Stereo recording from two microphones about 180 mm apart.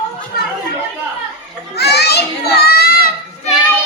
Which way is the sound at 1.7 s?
65° left (ahead or behind).